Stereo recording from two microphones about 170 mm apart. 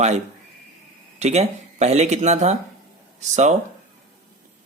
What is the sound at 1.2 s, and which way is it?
Speech, 40° right (ahead or behind).